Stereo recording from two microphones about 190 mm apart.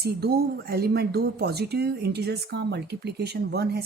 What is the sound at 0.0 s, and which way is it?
Speech, 60° right (ahead or behind).